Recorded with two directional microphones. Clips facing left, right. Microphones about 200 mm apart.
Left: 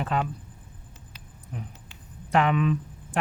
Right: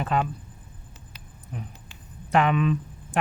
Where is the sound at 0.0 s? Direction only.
15° right (ahead or behind).